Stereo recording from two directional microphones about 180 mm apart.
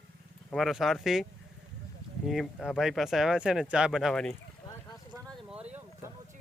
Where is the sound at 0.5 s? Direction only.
Centre (ahead or behind).